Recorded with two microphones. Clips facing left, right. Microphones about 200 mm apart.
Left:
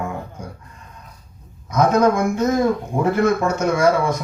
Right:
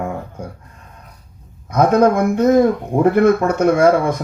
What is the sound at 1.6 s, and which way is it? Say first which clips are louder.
Speech: right 3 dB; 55° right (ahead or behind).